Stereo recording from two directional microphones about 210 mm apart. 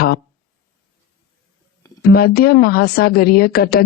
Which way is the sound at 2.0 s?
45° left (ahead or behind).